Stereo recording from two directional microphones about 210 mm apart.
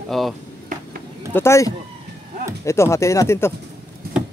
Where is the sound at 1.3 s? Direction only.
10° left (ahead or behind).